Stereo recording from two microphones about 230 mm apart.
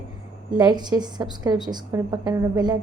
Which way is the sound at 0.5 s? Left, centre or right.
Centre.